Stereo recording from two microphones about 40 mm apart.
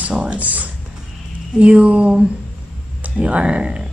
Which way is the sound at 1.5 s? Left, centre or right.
Right.